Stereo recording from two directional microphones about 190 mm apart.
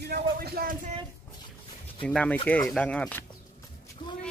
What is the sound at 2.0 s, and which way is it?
Speech, 5° left (ahead or behind).